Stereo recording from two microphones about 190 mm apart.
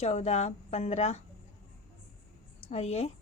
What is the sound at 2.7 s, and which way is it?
Speech, 35° left (ahead or behind).